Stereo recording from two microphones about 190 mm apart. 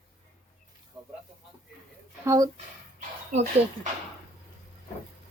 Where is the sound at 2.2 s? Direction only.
20° right (ahead or behind).